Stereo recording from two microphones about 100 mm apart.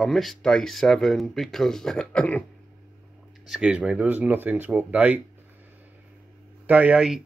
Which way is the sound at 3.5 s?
10° right (ahead or behind).